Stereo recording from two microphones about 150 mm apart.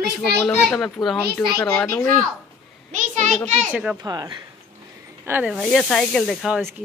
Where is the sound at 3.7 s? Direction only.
5° right (ahead or behind).